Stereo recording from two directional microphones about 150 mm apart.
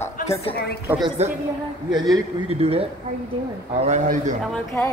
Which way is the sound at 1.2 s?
45° right (ahead or behind).